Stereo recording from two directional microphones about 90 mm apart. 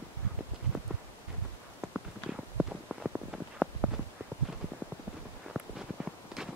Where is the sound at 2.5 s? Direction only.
5° right (ahead or behind).